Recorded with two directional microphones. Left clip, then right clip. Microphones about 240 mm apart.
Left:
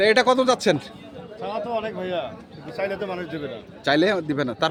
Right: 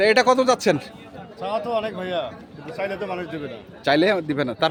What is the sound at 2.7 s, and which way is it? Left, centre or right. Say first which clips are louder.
A man's voice: even; centre.